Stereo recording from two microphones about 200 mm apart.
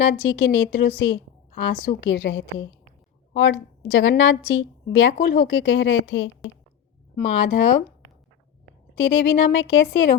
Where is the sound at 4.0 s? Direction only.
75° left (ahead or behind).